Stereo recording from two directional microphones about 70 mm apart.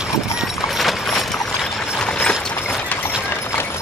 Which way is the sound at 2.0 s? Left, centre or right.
Centre.